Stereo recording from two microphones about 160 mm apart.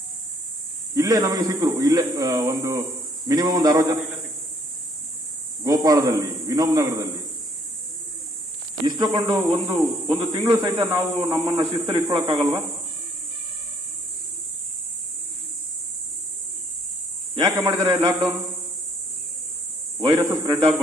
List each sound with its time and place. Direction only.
0.9 s speech: 20° right (ahead or behind)
5.6 s a man's voice: 25° right (ahead or behind)
8.8 s speech: 25° right (ahead or behind)
17.5 s speech: 20° right (ahead or behind)
20.0 s a man's voice: 30° right (ahead or behind)